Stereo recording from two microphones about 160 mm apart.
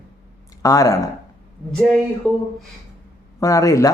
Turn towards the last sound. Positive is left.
turn(degrees=20)  # may be behind; listen again after turning